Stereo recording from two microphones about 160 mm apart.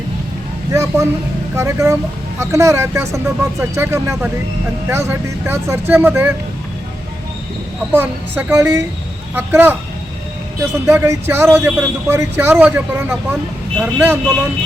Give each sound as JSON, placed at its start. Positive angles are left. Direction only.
{"t": 0.7, "sound": "speech", "side_deg": -20}
{"t": 7.9, "sound": "speech", "side_deg": -15}
{"t": 10.8, "sound": "speech", "side_deg": -15}